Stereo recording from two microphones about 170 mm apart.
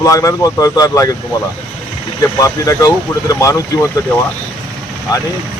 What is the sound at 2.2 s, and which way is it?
Speech, 20° left (ahead or behind).